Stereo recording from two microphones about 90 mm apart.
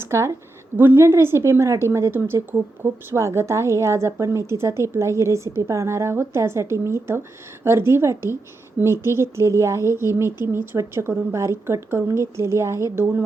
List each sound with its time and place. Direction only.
0.0 s a woman's voice: 30° right (ahead or behind)